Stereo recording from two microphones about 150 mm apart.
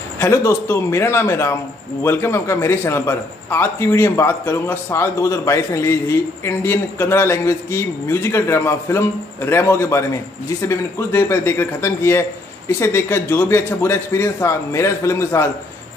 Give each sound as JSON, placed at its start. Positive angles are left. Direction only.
{"t": 0.2, "sound": "a man's voice", "side_deg": 15}